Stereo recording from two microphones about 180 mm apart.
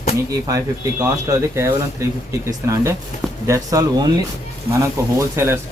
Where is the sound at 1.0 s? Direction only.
15° right (ahead or behind).